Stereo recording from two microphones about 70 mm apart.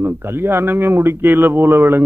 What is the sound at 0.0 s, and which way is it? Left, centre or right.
Speech, right.